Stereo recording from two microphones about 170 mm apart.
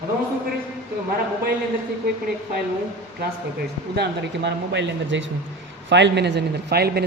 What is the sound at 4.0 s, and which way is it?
Speech, 90° right.